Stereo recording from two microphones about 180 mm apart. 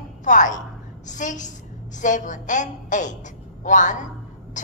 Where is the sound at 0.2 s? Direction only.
45° left (ahead or behind).